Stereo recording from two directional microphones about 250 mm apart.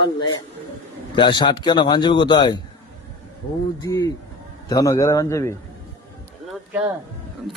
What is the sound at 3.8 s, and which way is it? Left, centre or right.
A man's voice, centre.